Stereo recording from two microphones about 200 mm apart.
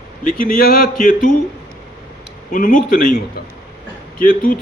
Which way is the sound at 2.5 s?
40° left (ahead or behind).